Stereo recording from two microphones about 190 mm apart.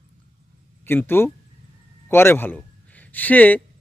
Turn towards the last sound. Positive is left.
turn(degrees=10)  # may be behind; listen again after turning